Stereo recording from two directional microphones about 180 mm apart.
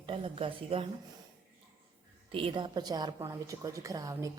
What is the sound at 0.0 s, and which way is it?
Speech, 30° right (ahead or behind).